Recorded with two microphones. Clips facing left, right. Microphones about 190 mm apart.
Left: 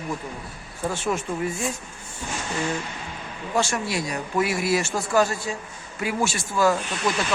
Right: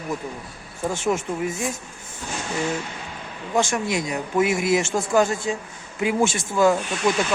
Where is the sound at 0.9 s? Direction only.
20° right (ahead or behind).